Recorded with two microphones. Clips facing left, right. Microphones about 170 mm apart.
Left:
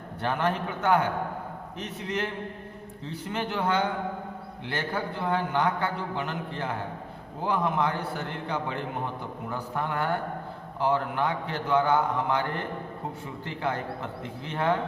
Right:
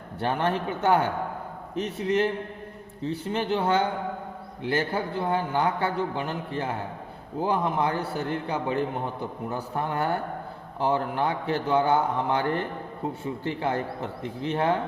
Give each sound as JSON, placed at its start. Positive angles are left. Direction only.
{"t": 0.2, "sound": "a man's voice", "side_deg": -30}
{"t": 7.4, "sound": "a man's voice", "side_deg": -30}